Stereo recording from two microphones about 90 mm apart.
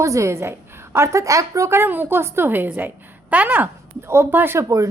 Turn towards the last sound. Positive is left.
turn(degrees=-40)  # may be behind; listen again after turning